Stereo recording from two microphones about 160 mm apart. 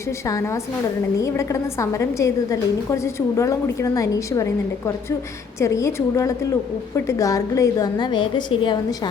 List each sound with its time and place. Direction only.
1.2 s a woman's voice: 20° left (ahead or behind)
5.5 s a woman's voice: 20° left (ahead or behind)